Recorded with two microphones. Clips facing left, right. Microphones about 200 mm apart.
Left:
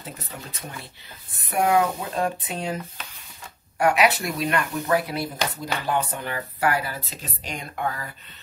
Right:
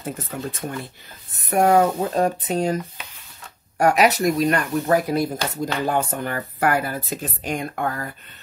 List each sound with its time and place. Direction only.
0.0 s speech: 50° right (ahead or behind)